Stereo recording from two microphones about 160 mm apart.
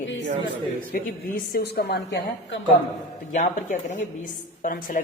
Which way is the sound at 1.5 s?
80° left.